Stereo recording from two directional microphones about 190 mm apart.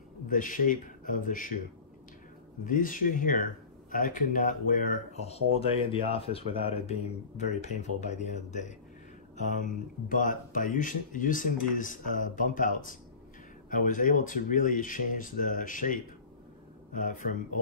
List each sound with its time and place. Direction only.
0.3 s speech: 45° left (ahead or behind)
2.6 s speech: 45° left (ahead or behind)